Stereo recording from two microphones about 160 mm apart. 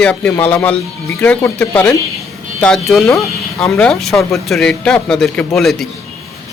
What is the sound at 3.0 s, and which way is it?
Speech, 20° left (ahead or behind).